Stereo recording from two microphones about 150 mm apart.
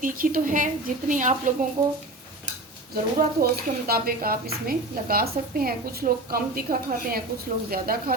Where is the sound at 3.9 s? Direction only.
80° right.